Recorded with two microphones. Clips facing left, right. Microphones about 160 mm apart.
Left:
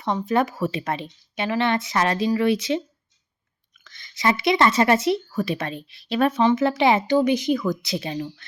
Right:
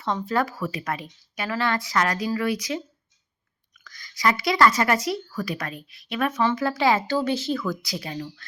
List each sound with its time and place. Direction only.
0.0 s speech: 15° left (ahead or behind)
6.4 s speech: 20° left (ahead or behind)